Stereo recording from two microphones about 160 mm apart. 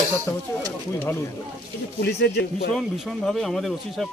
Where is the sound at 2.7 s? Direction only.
Centre (ahead or behind).